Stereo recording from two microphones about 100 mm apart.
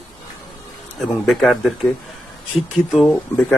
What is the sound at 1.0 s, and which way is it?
A man's voice, centre (ahead or behind).